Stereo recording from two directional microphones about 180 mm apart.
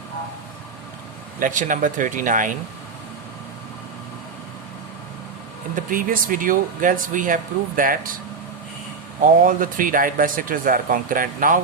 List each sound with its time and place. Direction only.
1.4 s speech: 45° right (ahead or behind)
5.9 s speech: 50° right (ahead or behind)
9.2 s speech: 50° right (ahead or behind)